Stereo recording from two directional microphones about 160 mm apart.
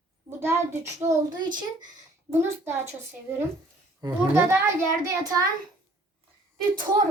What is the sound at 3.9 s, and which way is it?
A child's voice, 15° right (ahead or behind).